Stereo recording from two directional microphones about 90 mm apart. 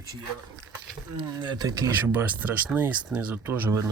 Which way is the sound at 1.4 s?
50° right (ahead or behind).